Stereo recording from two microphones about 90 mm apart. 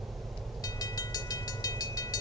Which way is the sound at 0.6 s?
45° left (ahead or behind).